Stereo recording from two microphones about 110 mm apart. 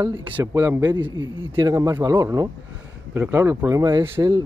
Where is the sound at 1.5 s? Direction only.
35° right (ahead or behind).